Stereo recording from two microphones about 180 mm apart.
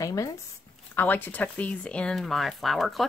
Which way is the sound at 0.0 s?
20° left (ahead or behind).